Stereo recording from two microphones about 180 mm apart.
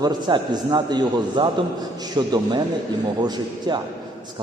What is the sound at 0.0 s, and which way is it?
A man's voice, 25° right (ahead or behind).